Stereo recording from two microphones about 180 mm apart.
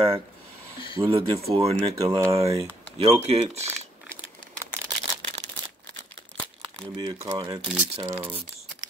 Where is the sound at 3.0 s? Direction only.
35° right (ahead or behind).